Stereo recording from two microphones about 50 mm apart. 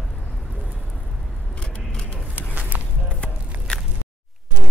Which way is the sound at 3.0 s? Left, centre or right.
Left.